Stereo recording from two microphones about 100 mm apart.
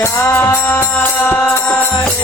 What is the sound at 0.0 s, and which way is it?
Music, 25° left (ahead or behind).